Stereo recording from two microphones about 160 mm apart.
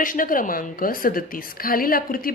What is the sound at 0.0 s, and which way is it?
A woman's voice, 60° left (ahead or behind).